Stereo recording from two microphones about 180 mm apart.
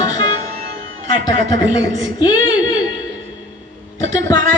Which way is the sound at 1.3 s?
45° right (ahead or behind).